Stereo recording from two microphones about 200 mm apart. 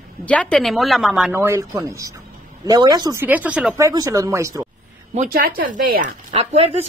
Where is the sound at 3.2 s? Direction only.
10° right (ahead or behind).